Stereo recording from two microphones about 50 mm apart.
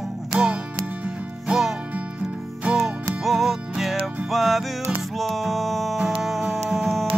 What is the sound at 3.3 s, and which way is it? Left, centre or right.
Music, centre.